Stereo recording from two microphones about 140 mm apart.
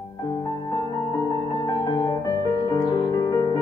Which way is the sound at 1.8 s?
30° left (ahead or behind).